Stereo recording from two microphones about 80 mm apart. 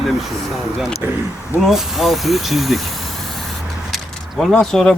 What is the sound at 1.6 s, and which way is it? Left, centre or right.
Speech, centre.